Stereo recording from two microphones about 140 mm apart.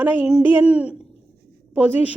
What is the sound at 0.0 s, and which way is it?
A woman's voice, 10° right (ahead or behind).